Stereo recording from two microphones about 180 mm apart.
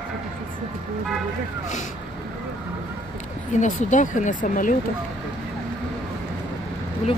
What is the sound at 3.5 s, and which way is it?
Speech, 45° left (ahead or behind).